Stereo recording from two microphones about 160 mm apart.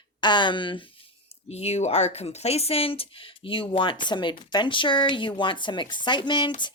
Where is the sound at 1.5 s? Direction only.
40° left (ahead or behind).